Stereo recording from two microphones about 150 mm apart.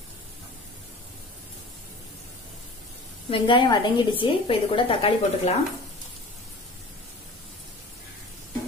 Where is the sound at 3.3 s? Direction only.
35° left (ahead or behind).